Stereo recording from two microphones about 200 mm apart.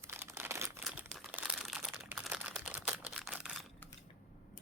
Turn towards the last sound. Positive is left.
turn(degrees=0)  # may be behind; listen again after turning